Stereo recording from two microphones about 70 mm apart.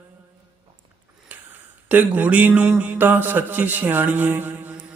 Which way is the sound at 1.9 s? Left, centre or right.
Right.